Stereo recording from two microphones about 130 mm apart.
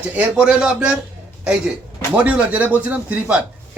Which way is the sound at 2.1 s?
10° right (ahead or behind).